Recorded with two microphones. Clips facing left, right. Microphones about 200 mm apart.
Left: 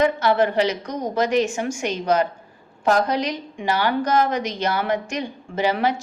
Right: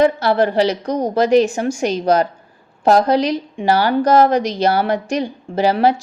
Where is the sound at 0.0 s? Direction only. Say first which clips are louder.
Right 4 dB; 35° right (ahead or behind).